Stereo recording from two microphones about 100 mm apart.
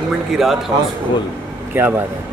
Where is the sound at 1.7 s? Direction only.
20° right (ahead or behind).